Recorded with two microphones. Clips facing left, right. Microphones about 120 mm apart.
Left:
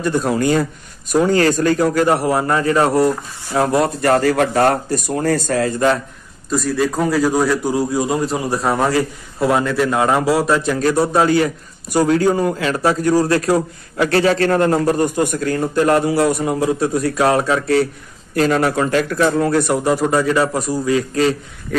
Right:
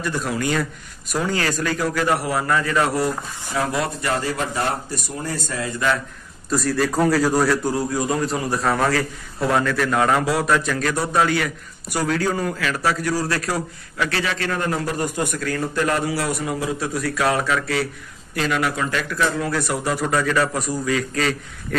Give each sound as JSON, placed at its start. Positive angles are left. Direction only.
{"t": 0.0, "sound": "a man's voice", "side_deg": 35}
{"t": 5.2, "sound": "a man's voice", "side_deg": 60}
{"t": 6.5, "sound": "a man's voice", "side_deg": 0}
{"t": 7.4, "sound": "a man's voice", "side_deg": 15}
{"t": 13.1, "sound": "a man's voice", "side_deg": 45}
{"t": 19.8, "sound": "a man's voice", "side_deg": 25}